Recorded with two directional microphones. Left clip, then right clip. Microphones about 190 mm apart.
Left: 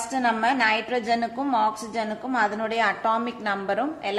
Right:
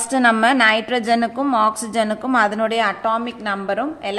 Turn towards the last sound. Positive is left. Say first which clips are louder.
# right 4 dB
turn(degrees=-10)  # may be behind; listen again after turning